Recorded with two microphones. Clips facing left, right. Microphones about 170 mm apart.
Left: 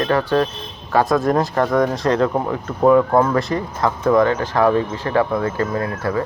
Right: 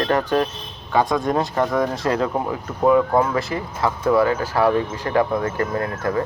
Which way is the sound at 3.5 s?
40° left (ahead or behind).